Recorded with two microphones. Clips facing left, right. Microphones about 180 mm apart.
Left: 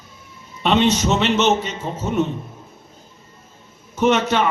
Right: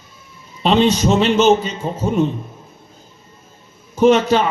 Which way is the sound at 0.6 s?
30° right (ahead or behind).